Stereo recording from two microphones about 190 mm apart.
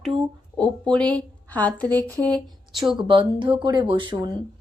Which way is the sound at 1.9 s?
15° right (ahead or behind).